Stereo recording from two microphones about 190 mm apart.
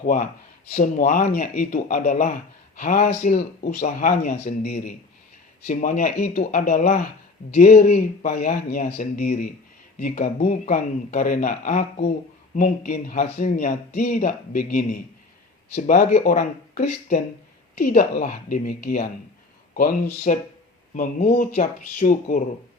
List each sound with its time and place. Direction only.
0.0 s speech: 45° left (ahead or behind)
20.3 s speech: 40° left (ahead or behind)